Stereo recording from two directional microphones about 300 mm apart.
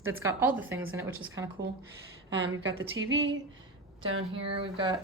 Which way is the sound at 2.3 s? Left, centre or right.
Right.